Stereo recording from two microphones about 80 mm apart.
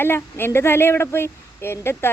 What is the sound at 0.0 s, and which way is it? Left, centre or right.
Speech, left.